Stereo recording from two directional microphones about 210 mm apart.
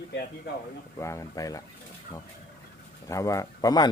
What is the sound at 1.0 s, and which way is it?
Speech, 15° left (ahead or behind).